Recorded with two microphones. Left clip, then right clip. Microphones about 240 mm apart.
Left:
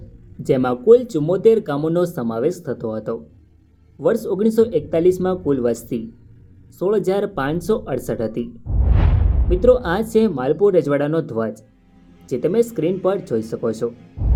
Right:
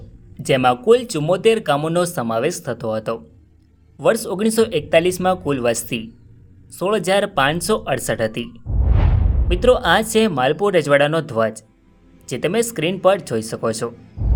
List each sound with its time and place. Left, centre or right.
0.4 s speech: right
8.7 s a sound: centre
9.5 s speech: right
13.3 s speech: right